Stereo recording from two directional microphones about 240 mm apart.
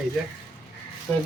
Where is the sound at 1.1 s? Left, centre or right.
Centre.